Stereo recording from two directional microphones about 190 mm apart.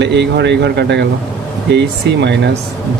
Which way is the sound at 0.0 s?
65° right (ahead or behind).